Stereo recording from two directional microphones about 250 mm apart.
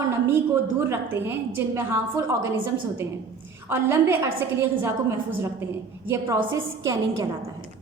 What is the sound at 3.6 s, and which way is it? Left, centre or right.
A woman's voice, centre.